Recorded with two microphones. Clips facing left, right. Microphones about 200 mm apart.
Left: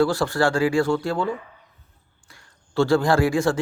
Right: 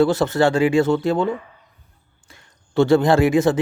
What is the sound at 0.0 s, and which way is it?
Speech, 20° right (ahead or behind).